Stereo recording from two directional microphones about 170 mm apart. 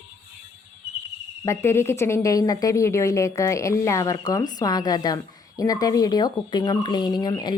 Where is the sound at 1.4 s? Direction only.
15° left (ahead or behind).